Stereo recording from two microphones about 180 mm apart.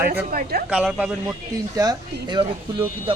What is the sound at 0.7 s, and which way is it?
Speech, 5° right (ahead or behind).